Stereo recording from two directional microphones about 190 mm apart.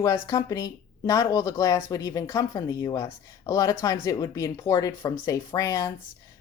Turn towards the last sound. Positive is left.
turn(degrees=15)  # may be behind; listen again after turning